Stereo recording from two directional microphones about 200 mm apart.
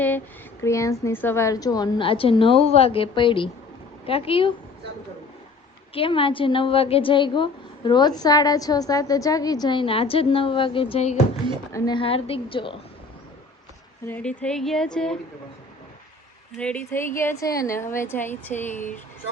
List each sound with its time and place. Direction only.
0.6 s a woman's voice: 15° left (ahead or behind)
5.9 s a woman's voice: 25° left (ahead or behind)
14.1 s speech: 5° left (ahead or behind)
16.6 s a woman's voice: 5° left (ahead or behind)
18.7 s speech: 40° left (ahead or behind)